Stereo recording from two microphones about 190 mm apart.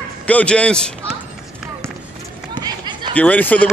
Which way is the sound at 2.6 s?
25° right (ahead or behind).